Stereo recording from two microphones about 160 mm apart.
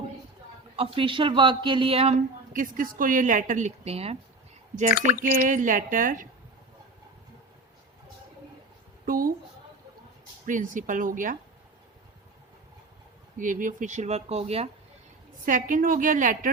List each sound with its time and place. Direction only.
0.8 s speech: 35° right (ahead or behind)
2.5 s a woman's voice: 60° right (ahead or behind); by 4.2 s 40° right (ahead or behind)
4.9 s speech: 65° left (ahead or behind)
5.2 s a woman's voice: 55° right (ahead or behind)
9.0 s a woman's voice: 60° right (ahead or behind)
10.4 s a woman's voice: 55° right (ahead or behind)
13.4 s speech: 55° right (ahead or behind)
15.4 s a woman's voice: 55° right (ahead or behind)